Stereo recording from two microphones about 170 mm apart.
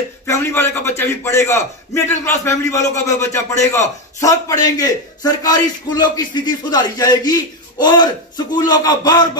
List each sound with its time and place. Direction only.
0.3 s a man's voice: 15° left (ahead or behind)